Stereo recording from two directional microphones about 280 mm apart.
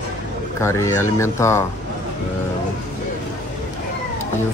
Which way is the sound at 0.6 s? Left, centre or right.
Centre.